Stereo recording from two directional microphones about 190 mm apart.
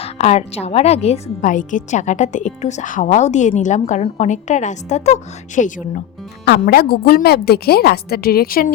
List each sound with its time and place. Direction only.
0.0 s a woman's voice: 35° left (ahead or behind)
6.4 s a woman's voice: 55° left (ahead or behind)